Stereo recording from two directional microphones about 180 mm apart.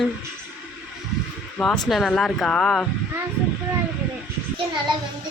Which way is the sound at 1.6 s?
Centre (ahead or behind).